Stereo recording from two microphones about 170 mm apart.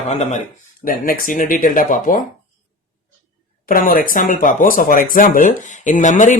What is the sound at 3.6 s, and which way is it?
Speech, 55° left (ahead or behind).